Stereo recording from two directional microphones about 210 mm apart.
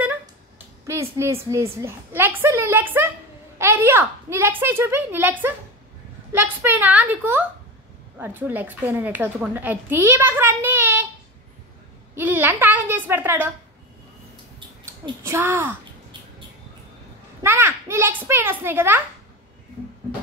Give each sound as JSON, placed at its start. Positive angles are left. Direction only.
{"t": 0.8, "sound": "a woman's voice", "side_deg": -15}
{"t": 12.2, "sound": "a woman's voice", "side_deg": -10}
{"t": 15.0, "sound": "a woman's voice", "side_deg": -10}
{"t": 17.4, "sound": "a child's voice", "side_deg": -10}